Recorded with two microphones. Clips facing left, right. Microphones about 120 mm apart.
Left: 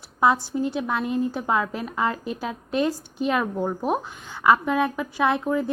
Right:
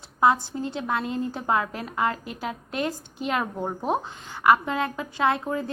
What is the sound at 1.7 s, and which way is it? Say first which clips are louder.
Speech: left 1 dB; 20° left (ahead or behind).